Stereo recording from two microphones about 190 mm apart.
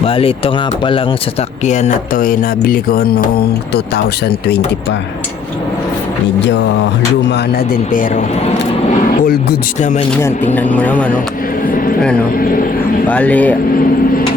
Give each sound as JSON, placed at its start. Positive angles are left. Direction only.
{"t": 0.0, "sound": "speech", "side_deg": 30}
{"t": 6.5, "sound": "music", "side_deg": 75}
{"t": 7.3, "sound": "speech", "side_deg": 55}
{"t": 10.2, "sound": "speech", "side_deg": 10}
{"t": 11.6, "sound": "a sound", "side_deg": 50}
{"t": 12.4, "sound": "speech", "side_deg": 50}
{"t": 13.1, "sound": "speech", "side_deg": 10}